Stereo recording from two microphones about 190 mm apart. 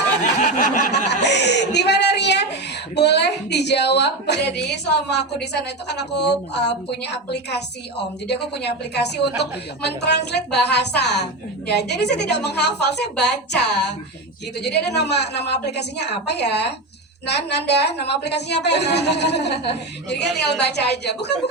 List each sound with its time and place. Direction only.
0.3 s a sound: 40° left (ahead or behind)
1.2 s speech: 65° left (ahead or behind)
14.6 s speech: 60° left (ahead or behind)